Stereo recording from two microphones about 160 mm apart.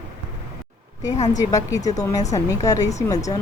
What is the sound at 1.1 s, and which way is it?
Speech, 45° left (ahead or behind).